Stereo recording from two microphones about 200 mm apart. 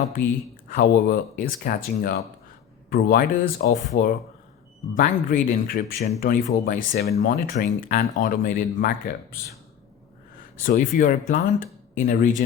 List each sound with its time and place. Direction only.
0.7 s speech: 45° left (ahead or behind)
10.6 s speech: 45° left (ahead or behind)